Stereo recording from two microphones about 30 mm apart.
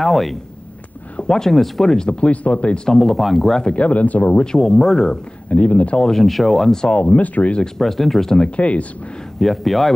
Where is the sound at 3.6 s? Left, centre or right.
Left.